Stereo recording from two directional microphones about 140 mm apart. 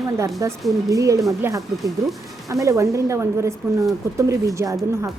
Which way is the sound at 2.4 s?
25° right (ahead or behind).